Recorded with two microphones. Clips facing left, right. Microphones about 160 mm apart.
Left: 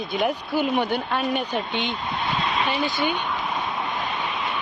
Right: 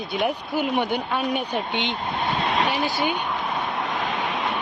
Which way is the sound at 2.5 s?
80° right.